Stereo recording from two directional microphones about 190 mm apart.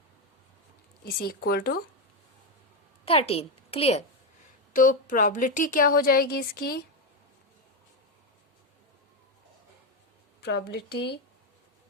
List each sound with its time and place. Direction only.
1.0 s a woman's voice: 50° left (ahead or behind)
3.1 s a woman's voice: 30° left (ahead or behind)
4.7 s a woman's voice: 45° left (ahead or behind)
10.4 s speech: 60° left (ahead or behind)